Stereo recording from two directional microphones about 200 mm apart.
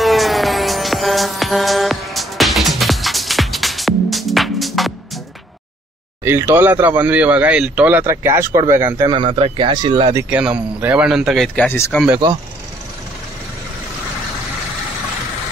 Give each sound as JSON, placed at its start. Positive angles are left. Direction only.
{"t": 0.0, "sound": "music", "side_deg": 0}
{"t": 6.2, "sound": "speech", "side_deg": -10}
{"t": 9.1, "sound": "speech", "side_deg": -25}
{"t": 10.3, "sound": "speech", "side_deg": -10}